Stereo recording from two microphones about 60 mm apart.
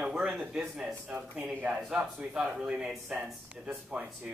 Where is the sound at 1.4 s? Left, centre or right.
Right.